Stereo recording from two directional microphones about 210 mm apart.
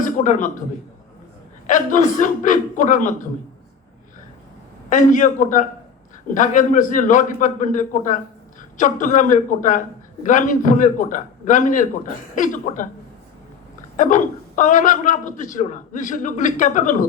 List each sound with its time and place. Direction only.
0.0 s a man's voice: 40° left (ahead or behind)
1.6 s a man's voice: 40° left (ahead or behind)
4.9 s a man's voice: 40° left (ahead or behind)
13.9 s a man's voice: 40° left (ahead or behind)